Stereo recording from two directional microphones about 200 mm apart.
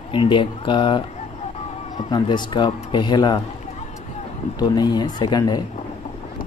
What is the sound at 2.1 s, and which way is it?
Speech, 20° left (ahead or behind).